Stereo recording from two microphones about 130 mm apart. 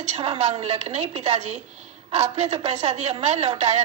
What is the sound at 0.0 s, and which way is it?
A woman's voice, 55° right (ahead or behind).